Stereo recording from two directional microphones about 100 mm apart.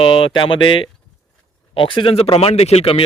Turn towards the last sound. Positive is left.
turn(degrees=70)  # may be behind; listen again after turning